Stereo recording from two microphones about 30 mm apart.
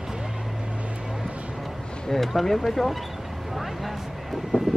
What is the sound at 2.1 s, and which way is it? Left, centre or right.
Speech, centre.